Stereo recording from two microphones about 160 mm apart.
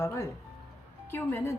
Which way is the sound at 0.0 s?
15° left (ahead or behind).